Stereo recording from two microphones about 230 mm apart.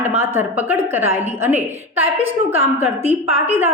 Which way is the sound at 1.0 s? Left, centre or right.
Right.